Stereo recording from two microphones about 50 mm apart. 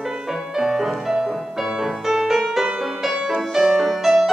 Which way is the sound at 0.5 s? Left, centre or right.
Centre.